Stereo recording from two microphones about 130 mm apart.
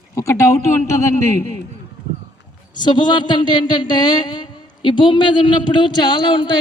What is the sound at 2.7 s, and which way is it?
Speech, 35° left (ahead or behind).